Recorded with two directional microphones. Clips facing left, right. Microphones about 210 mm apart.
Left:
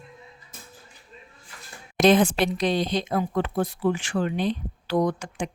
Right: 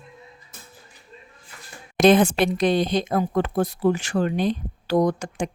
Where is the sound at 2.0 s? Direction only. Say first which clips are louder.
Right 2 dB; 55° right (ahead or behind).